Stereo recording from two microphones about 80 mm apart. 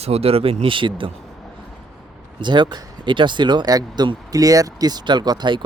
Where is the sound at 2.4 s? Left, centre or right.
Right.